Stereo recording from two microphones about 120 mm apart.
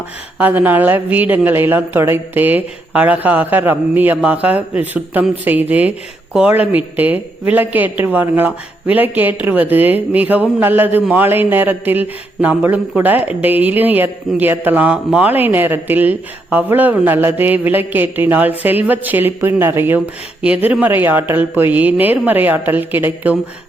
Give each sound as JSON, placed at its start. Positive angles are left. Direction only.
{"t": 0.3, "sound": "speech", "side_deg": -15}